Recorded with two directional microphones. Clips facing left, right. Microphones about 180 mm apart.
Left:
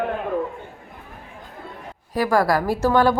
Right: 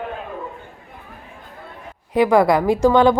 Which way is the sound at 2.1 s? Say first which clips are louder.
Right 5 dB; 20° right (ahead or behind).